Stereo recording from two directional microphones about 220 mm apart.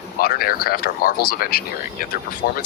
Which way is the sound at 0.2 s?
40° left (ahead or behind).